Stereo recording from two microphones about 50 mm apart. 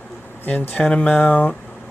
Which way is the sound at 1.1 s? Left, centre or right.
Left.